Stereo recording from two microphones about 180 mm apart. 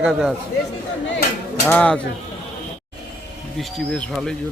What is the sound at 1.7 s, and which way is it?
Speech, 10° left (ahead or behind).